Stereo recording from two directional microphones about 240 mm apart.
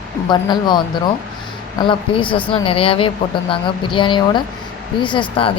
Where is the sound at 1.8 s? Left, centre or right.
Left.